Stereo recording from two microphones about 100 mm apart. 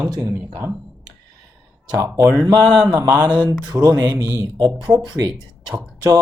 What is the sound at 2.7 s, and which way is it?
Speech, 10° right (ahead or behind).